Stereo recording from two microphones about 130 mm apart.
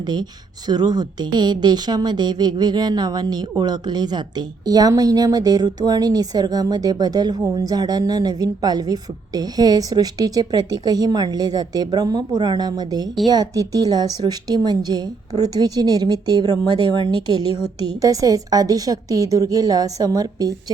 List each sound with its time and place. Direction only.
0.0 s a woman's voice: 35° right (ahead or behind)